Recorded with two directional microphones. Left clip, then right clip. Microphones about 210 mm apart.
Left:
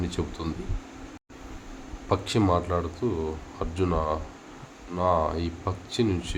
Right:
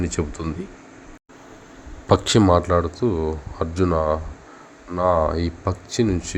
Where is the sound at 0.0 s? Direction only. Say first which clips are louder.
Right 5 dB; 20° right (ahead or behind).